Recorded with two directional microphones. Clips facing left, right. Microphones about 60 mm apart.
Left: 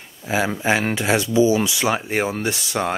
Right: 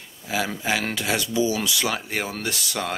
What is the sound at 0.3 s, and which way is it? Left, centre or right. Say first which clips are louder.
Speech: left 5 dB; left.